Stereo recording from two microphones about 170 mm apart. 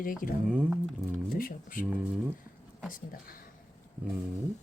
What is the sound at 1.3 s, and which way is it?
Speech, 55° left (ahead or behind).